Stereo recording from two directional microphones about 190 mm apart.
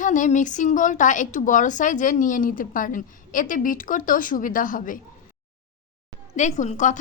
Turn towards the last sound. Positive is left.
turn(degrees=40)  # may be behind; listen again after turning